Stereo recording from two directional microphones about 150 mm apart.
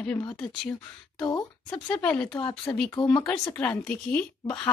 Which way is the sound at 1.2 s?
30° left (ahead or behind).